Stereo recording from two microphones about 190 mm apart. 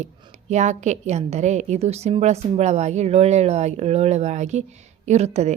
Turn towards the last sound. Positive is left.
turn(degrees=-35)  # may be behind; listen again after turning